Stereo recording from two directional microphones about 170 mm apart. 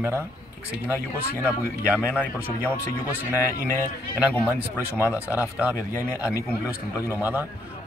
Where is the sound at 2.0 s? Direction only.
15° left (ahead or behind).